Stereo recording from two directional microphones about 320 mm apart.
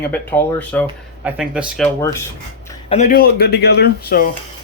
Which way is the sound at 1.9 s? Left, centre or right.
Centre.